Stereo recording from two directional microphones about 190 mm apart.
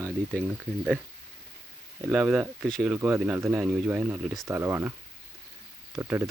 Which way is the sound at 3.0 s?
10° right (ahead or behind).